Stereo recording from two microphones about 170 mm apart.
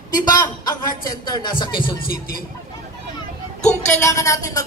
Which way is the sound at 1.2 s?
25° left (ahead or behind).